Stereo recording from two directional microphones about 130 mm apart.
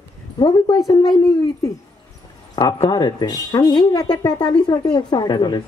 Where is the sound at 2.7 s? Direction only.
35° left (ahead or behind).